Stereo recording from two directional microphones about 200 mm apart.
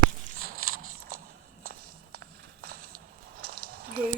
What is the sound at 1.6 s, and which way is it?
Walk, 50° right (ahead or behind).